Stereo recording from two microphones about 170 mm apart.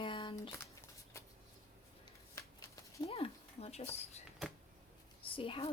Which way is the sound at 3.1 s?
35° left (ahead or behind).